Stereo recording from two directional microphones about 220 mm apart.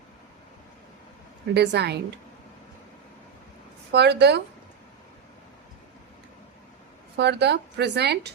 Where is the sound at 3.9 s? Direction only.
50° right (ahead or behind).